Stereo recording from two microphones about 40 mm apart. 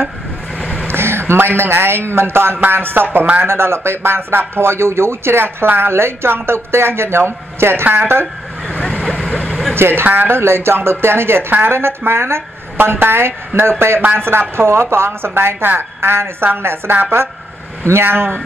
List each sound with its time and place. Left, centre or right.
0.9 s a man's voice: right
2.7 s speech: right
3.4 s speech: right
8.8 s vehicle: left
9.8 s speech: right
10.0 s speech: right
13.6 s speech: right
17.9 s speech: right